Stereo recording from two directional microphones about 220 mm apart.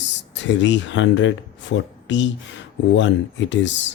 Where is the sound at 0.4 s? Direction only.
55° left (ahead or behind).